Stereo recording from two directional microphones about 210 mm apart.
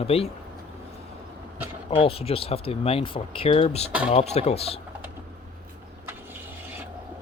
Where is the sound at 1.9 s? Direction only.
25° left (ahead or behind).